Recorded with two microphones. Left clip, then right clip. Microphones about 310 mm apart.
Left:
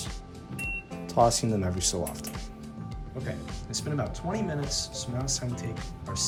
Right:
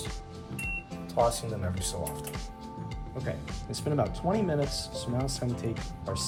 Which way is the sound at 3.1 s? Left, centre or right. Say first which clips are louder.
Even; centre.